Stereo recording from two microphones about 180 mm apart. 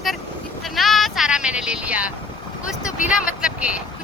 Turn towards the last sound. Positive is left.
turn(degrees=-5)  # may be behind; listen again after turning